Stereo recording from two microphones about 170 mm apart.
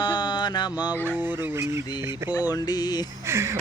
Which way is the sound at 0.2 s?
25° left (ahead or behind).